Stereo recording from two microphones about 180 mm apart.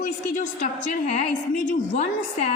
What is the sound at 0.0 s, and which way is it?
A woman's voice, 45° left (ahead or behind).